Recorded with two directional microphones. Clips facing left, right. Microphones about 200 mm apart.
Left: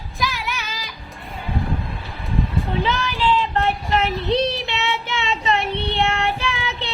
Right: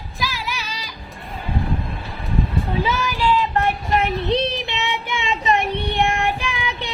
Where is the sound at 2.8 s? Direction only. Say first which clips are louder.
Even; 10° right (ahead or behind).